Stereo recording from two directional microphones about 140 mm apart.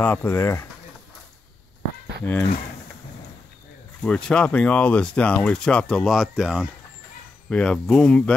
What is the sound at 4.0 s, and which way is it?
Speech, 5° left (ahead or behind).